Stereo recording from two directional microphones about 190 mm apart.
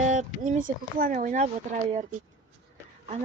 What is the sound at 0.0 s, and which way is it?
Speech, 40° right (ahead or behind).